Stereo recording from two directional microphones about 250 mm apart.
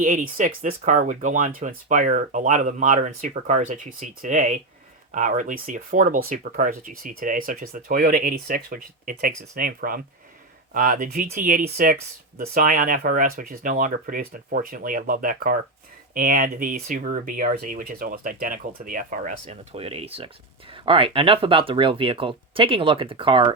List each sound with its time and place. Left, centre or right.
0.0 s speech: right